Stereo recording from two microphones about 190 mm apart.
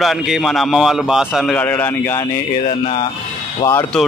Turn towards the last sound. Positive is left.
turn(degrees=15)  # may be behind; listen again after turning